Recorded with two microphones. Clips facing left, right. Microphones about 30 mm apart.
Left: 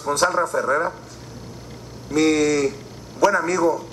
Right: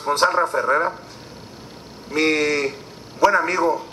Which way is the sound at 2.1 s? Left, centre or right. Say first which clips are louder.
Left 1 dB; right.